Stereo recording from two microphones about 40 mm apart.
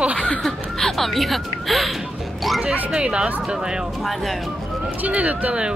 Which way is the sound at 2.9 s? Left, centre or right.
Right.